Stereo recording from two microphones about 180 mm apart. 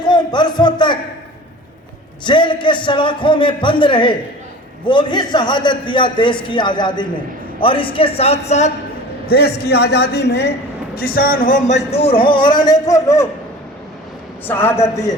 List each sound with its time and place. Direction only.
0.0 s a sound: 25° left (ahead or behind)
2.2 s a man's voice: 25° left (ahead or behind)
9.2 s a man's voice: 60° left (ahead or behind)
10.9 s speech: 60° left (ahead or behind); by 13.2 s 15° left (ahead or behind)
14.4 s a man's voice: 10° left (ahead or behind)